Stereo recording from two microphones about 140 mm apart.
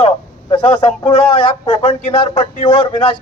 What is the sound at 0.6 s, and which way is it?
Speech, 10° left (ahead or behind).